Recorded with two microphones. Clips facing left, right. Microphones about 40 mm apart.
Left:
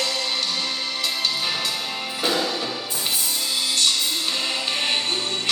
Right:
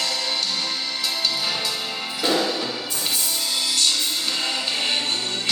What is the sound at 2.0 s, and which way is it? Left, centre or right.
Music, left.